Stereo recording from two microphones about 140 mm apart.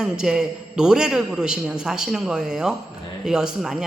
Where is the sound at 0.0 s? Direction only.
5° right (ahead or behind).